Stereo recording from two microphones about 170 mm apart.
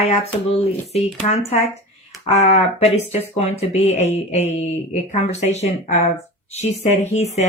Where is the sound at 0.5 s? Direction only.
40° left (ahead or behind).